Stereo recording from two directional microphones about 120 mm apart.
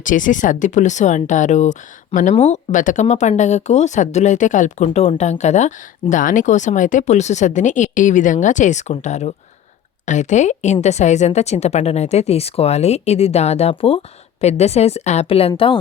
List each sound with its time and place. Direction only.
0.0 s speech: 90° left; by 9.3 s 75° left (ahead or behind)
10.1 s a woman's voice: 85° left; by 15.8 s 50° left (ahead or behind)